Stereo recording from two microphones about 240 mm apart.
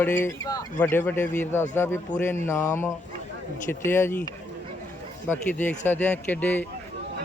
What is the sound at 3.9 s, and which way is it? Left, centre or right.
Speech, centre.